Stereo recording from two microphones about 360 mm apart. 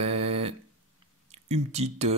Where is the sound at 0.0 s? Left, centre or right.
Centre.